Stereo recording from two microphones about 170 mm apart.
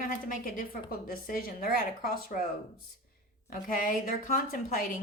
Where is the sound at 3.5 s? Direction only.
50° left (ahead or behind).